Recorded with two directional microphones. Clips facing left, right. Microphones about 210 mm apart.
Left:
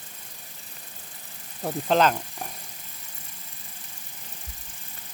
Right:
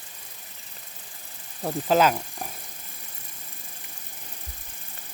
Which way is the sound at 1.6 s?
Centre (ahead or behind).